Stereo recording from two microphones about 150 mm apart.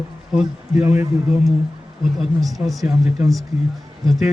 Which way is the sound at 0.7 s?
15° right (ahead or behind).